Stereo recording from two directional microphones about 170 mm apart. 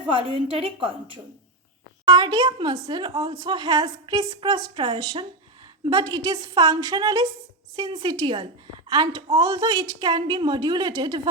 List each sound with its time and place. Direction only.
0.1 s a woman's voice: 30° right (ahead or behind)
2.0 s a woman's voice: 25° right (ahead or behind)